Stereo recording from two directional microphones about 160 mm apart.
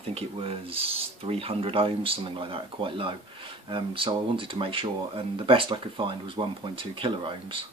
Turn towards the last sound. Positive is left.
turn(degrees=-35)  # may be behind; listen again after turning